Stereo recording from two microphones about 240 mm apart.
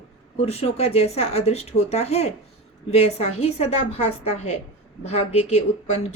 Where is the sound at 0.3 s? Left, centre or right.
Left.